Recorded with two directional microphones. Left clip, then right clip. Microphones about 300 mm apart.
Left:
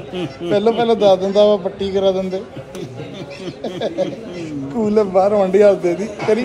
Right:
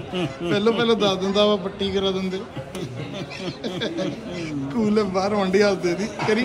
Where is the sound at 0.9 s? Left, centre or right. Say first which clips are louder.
Left 9 dB; centre.